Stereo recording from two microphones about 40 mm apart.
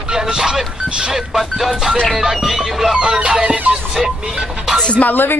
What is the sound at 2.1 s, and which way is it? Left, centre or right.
Speech, centre.